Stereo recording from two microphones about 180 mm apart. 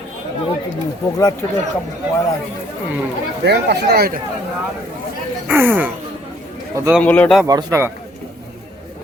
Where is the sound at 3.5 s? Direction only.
65° right (ahead or behind).